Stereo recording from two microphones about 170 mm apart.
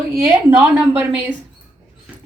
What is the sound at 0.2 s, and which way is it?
Speech, 10° right (ahead or behind).